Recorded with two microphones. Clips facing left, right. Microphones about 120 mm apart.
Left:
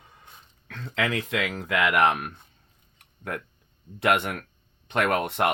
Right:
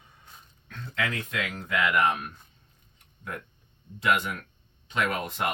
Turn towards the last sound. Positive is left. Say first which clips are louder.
# left 5 dB
turn(degrees=60)  # may be behind; listen again after turning